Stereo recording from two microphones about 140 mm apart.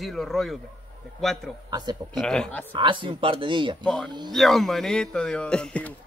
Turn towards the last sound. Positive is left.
turn(degrees=10)  # may be behind; listen again after turning